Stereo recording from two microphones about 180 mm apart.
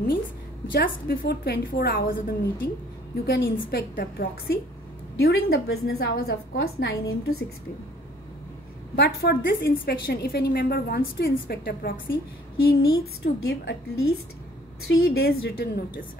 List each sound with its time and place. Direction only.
0.7 s a woman's voice: 55° left (ahead or behind)
3.3 s a woman's voice: 65° left (ahead or behind)
8.9 s a woman's voice: 65° left (ahead or behind)